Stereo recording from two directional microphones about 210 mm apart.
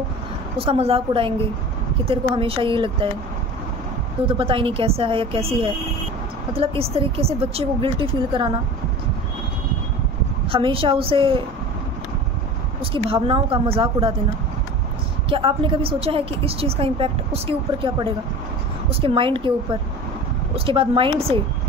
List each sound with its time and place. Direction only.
0.6 s a woman's voice: 25° right (ahead or behind)
4.3 s a woman's voice: 25° right (ahead or behind)
10.5 s a woman's voice: 25° right (ahead or behind)
12.9 s a woman's voice: 25° right (ahead or behind)
15.2 s a woman's voice: 25° right (ahead or behind)